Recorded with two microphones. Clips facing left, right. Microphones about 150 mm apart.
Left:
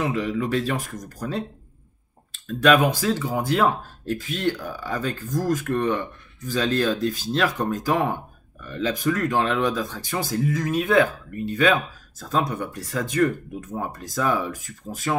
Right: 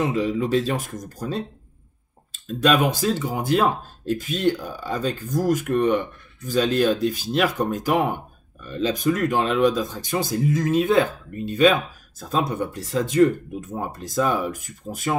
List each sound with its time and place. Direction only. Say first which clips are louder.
0.0 s speech: right 2 dB; 20° right (ahead or behind)
2.4 s speech: left 1 dB; 20° right (ahead or behind)